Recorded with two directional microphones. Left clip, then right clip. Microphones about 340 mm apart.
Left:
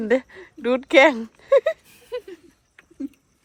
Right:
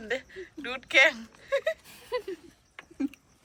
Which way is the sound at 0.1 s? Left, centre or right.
Centre.